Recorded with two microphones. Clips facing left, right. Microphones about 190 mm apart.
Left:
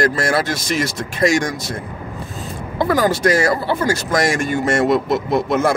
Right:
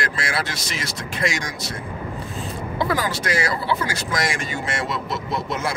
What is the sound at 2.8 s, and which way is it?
Speech, 45° left (ahead or behind).